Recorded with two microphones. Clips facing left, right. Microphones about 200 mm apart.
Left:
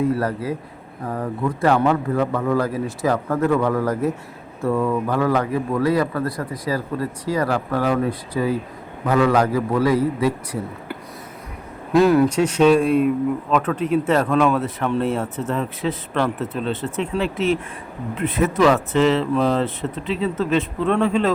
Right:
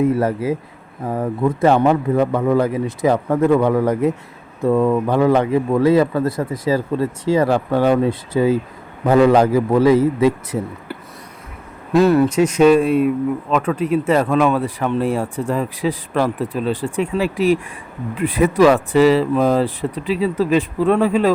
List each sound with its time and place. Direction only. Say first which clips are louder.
0.0 s a man's voice: right 4 dB; 20° right (ahead or behind)
11.9 s speech: right 2 dB; centre (ahead or behind)
15.4 s speech: right 3 dB; 10° right (ahead or behind)